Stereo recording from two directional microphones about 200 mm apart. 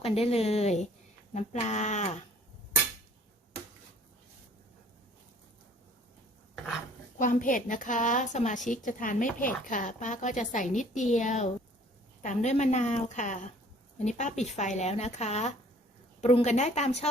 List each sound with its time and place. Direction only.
0.0 s a woman's voice: 30° left (ahead or behind)
7.2 s a woman's voice: 40° left (ahead or behind)